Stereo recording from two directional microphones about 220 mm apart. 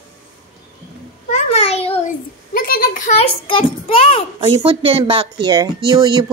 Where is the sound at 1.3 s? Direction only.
30° left (ahead or behind).